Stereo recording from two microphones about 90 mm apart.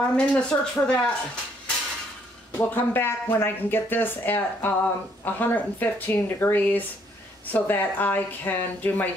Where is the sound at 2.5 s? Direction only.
25° left (ahead or behind).